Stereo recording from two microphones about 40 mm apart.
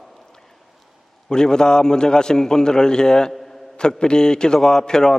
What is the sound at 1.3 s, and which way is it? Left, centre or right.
A man's voice, centre.